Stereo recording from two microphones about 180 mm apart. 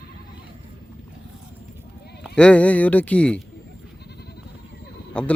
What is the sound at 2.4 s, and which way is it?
A man's voice, 5° left (ahead or behind).